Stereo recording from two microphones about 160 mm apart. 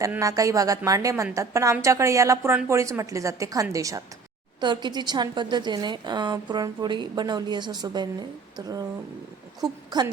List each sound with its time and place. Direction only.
0.0 s a woman's voice: 20° right (ahead or behind)